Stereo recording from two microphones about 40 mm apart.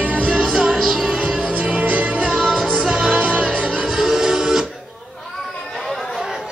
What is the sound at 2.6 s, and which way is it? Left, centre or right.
Music, centre.